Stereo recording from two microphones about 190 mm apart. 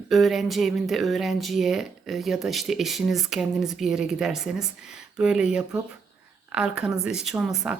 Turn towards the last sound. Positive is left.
turn(degrees=-5)  # may be behind; listen again after turning